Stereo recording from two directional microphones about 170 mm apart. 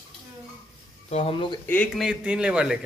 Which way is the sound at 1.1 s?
35° left (ahead or behind).